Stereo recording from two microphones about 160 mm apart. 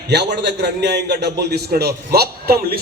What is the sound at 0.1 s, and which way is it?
A man's voice, 90° right.